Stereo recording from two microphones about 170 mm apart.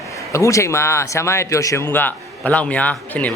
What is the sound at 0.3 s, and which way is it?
Speech, 15° left (ahead or behind).